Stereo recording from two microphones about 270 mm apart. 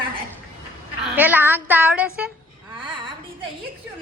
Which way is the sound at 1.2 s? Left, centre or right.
Centre.